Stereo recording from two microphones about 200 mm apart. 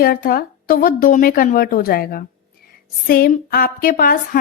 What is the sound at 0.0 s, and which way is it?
A woman's voice, 45° left (ahead or behind).